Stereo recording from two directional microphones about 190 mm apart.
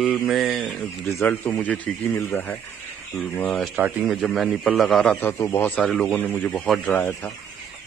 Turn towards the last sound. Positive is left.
turn(degrees=10)  # may be behind; listen again after turning